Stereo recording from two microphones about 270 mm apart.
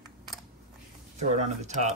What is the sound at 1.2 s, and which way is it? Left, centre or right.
Speech, right.